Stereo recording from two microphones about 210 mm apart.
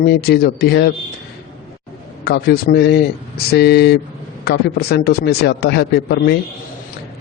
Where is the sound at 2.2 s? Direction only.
50° left (ahead or behind).